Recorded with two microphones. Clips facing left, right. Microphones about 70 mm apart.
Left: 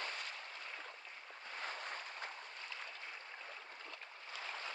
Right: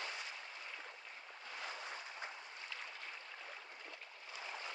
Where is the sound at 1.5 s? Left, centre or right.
Left.